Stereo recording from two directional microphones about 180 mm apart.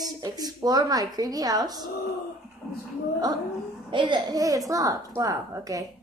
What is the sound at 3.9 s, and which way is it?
A child's voice, 25° right (ahead or behind).